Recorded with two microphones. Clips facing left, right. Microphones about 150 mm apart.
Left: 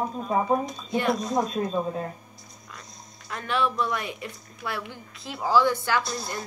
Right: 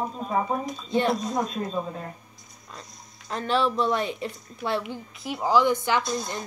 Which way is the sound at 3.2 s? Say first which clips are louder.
Right 3 dB; 30° right (ahead or behind).